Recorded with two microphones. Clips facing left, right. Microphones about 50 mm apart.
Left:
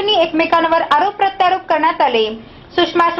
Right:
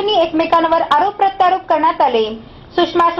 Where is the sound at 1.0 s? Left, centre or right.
Left.